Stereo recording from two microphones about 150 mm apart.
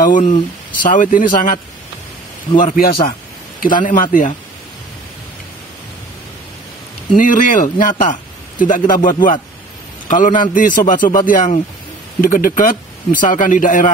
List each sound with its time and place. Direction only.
0.0 s a man's voice: 60° left (ahead or behind)
7.2 s a man's voice: 65° left (ahead or behind)